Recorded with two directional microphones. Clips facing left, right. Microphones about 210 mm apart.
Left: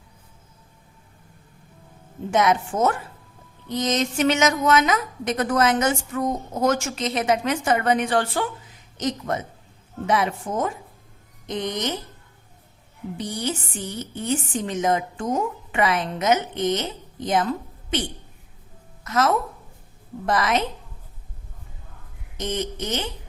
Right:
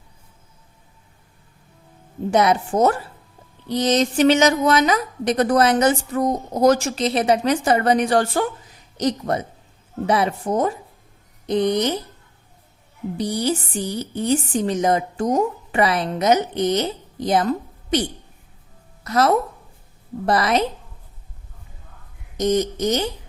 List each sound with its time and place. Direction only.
2.3 s a woman's voice: 35° right (ahead or behind)
13.1 s a woman's voice: 35° right (ahead or behind)
19.0 s a woman's voice: 35° right (ahead or behind)
22.4 s a woman's voice: 40° right (ahead or behind)